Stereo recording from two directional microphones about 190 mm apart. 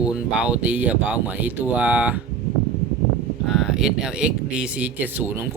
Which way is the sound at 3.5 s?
Centre (ahead or behind).